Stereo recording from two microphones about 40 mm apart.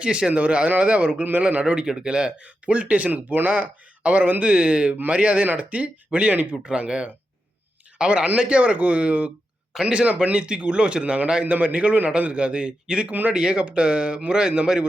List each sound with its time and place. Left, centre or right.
0.0 s speech: right
1.6 s speech: centre
2.4 s a man's voice: right
13.1 s speech: right
13.3 s speech: right